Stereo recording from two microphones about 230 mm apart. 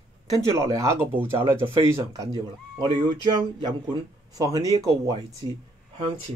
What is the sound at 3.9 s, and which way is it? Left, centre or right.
Speech, centre.